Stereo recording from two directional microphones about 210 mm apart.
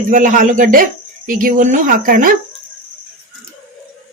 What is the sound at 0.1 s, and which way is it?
Speech, 40° right (ahead or behind).